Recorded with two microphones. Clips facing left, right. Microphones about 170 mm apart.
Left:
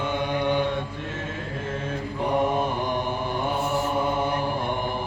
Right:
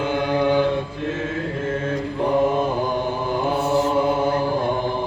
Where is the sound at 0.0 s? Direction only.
90° right.